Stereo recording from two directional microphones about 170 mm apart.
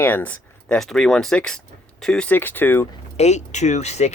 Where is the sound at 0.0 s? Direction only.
10° left (ahead or behind).